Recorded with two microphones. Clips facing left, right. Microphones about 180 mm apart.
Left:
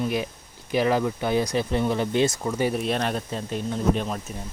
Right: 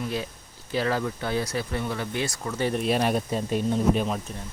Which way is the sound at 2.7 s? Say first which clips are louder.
Right 2 dB; 5° right (ahead or behind).